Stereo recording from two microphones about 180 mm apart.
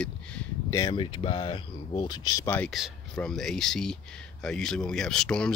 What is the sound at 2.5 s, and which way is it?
Speech, centre (ahead or behind).